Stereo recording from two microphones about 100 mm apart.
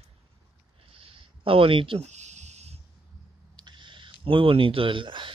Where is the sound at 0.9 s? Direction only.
65° right (ahead or behind).